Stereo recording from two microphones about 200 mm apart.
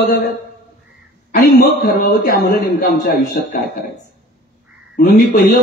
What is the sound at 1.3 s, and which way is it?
A man's voice, 50° left (ahead or behind).